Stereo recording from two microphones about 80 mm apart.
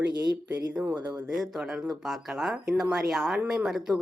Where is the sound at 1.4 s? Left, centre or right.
Centre.